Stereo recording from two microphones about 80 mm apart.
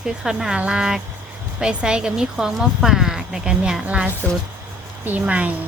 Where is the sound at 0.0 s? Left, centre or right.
Centre.